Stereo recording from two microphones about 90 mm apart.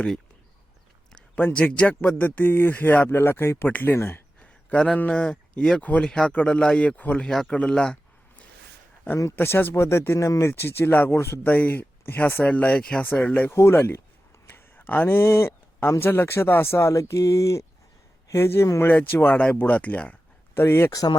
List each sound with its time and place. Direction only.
1.4 s speech: 20° left (ahead or behind)
4.4 s a sound: 15° left (ahead or behind)
4.9 s speech: 15° left (ahead or behind)
9.3 s speech: 25° left (ahead or behind)
13.5 s speech: 30° left (ahead or behind)
20.6 s speech: 30° left (ahead or behind)